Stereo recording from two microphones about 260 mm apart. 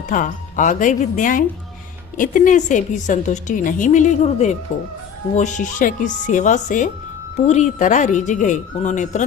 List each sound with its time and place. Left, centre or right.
0.1 s a woman's voice: left